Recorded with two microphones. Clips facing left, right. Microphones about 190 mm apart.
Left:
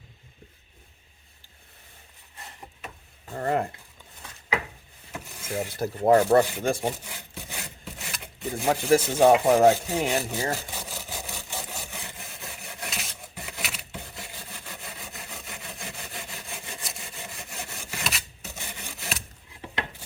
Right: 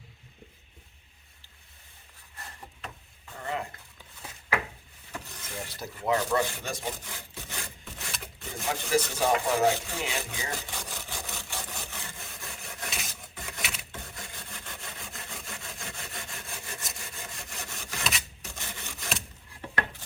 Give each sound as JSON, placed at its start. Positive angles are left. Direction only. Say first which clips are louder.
{"t": 3.2, "sound": "speech", "louder": "left 8 dB", "side_deg": 50}
{"t": 5.1, "sound": "vehicle", "louder": "left 2 dB", "side_deg": 10}
{"t": 5.5, "sound": "speech", "louder": "left 10 dB", "side_deg": 55}
{"t": 5.9, "sound": "speech", "louder": "left 9 dB", "side_deg": 40}
{"t": 7.0, "sound": "wood", "louder": "left 2 dB", "side_deg": 10}
{"t": 8.6, "sound": "speech", "louder": "left 6 dB", "side_deg": 45}
{"t": 10.7, "sound": "wood", "louder": "left 2 dB", "side_deg": 10}
{"t": 16.6, "sound": "rub", "louder": "left 2 dB", "side_deg": 5}